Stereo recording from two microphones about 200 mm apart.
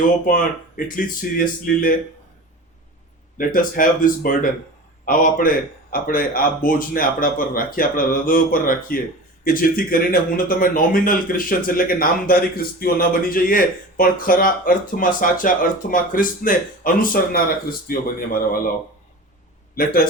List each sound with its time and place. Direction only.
0.3 s speech: 40° left (ahead or behind)
3.3 s speech: 45° left (ahead or behind)
19.7 s a man's voice: 45° left (ahead or behind)